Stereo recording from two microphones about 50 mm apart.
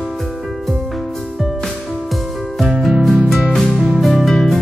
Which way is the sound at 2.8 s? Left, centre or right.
Centre.